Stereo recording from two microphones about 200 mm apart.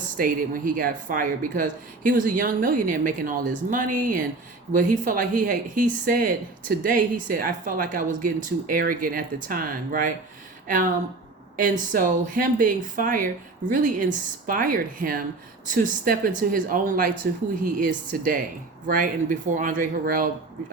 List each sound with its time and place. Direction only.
0.2 s speech: 45° right (ahead or behind)